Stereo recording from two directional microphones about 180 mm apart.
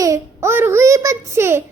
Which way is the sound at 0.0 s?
15° right (ahead or behind).